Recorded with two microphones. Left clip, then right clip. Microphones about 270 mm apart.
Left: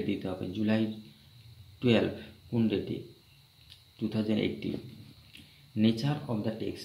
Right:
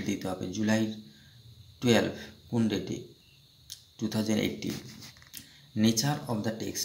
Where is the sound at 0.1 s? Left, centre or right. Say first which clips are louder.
Right 1 dB; right.